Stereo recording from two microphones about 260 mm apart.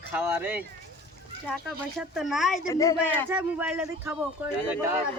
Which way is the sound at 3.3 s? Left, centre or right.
Centre.